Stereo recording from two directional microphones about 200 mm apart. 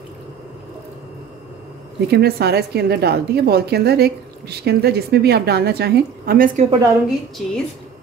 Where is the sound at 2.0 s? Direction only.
50° right (ahead or behind).